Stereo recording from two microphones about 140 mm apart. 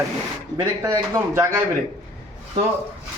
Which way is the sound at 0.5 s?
20° right (ahead or behind).